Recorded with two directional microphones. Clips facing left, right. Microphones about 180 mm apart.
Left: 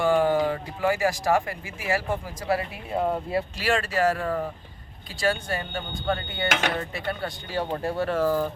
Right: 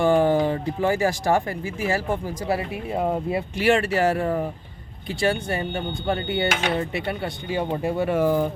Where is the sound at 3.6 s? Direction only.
25° right (ahead or behind).